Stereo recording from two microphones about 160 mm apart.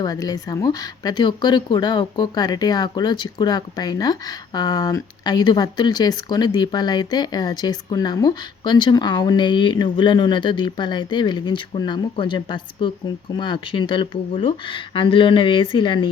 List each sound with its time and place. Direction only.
0.0 s a woman's voice: 25° left (ahead or behind)